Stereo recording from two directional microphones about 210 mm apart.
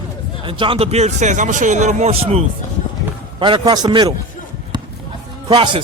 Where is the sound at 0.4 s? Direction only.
25° right (ahead or behind).